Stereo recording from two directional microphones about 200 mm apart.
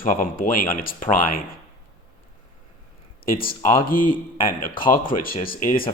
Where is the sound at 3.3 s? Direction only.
45° left (ahead or behind).